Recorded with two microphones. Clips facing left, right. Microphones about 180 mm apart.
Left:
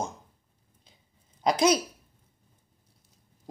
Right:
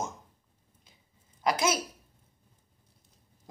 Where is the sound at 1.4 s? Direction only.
20° left (ahead or behind).